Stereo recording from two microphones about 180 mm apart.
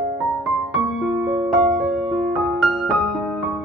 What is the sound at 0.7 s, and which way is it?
Music, centre (ahead or behind).